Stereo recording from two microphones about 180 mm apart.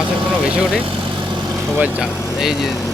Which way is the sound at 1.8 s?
5° right (ahead or behind).